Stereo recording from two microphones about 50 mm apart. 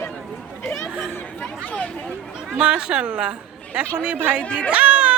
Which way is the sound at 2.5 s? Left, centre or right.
Right.